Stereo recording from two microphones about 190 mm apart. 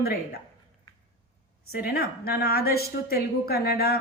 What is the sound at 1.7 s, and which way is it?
A woman's voice, 55° left (ahead or behind).